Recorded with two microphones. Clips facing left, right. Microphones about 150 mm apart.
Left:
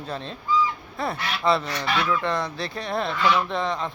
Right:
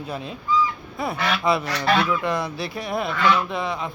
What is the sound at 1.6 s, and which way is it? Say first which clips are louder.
Goose: right 5 dB; 70° right (ahead or behind).